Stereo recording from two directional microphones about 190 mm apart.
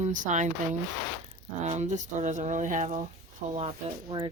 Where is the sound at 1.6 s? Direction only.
35° right (ahead or behind).